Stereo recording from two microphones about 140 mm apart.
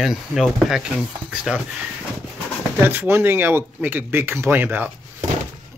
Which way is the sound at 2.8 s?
15° right (ahead or behind).